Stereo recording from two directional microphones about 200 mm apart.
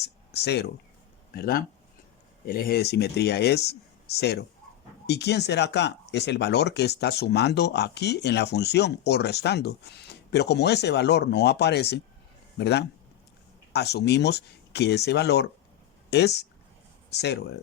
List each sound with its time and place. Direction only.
0.0 s speech: 55° left (ahead or behind)